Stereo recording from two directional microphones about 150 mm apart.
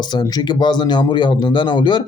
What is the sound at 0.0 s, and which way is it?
Speech, 30° left (ahead or behind).